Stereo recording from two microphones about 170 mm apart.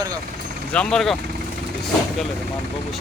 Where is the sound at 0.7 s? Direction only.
5° left (ahead or behind).